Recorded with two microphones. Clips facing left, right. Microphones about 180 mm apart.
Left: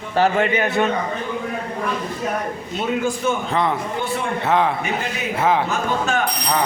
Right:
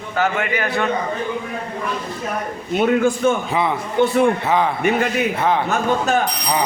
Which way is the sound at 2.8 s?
55° right (ahead or behind).